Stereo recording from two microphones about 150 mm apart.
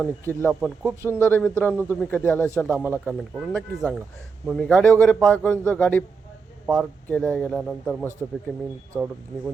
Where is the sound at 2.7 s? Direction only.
15° right (ahead or behind).